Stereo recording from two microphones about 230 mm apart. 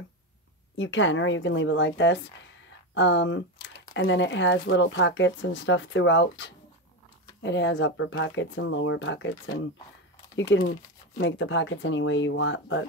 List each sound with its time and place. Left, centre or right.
0.7 s speech: left